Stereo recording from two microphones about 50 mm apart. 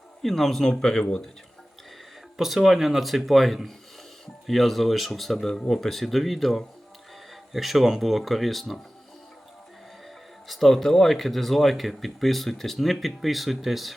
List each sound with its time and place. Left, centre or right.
0.2 s speech: centre
2.4 s speech: centre
10.5 s speech: centre